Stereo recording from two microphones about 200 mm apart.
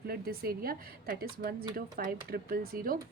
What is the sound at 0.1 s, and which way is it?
A woman's voice, 50° right (ahead or behind).